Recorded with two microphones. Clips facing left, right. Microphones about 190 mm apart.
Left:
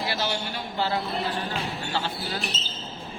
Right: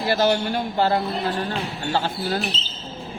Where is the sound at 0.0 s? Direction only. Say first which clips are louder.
Right 9 dB; 45° right (ahead or behind).